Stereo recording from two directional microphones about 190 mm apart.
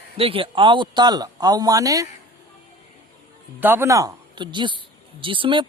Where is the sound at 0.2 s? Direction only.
30° right (ahead or behind).